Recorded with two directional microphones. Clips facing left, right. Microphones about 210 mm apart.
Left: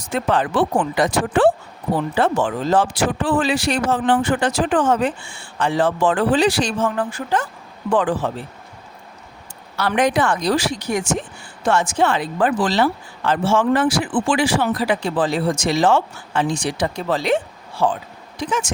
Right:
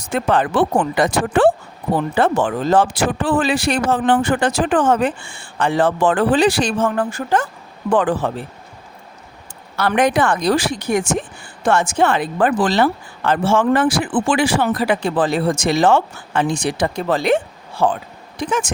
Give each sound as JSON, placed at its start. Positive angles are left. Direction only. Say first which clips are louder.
{"t": 0.1, "sound": "speech", "louder": "right 2 dB", "side_deg": -55}
{"t": 9.7, "sound": "speech", "louder": "right 2 dB", "side_deg": -55}